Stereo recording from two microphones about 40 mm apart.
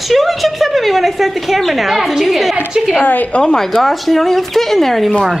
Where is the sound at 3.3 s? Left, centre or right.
Left.